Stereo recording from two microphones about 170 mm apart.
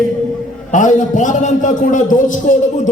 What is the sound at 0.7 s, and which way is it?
A man's voice, 50° left (ahead or behind).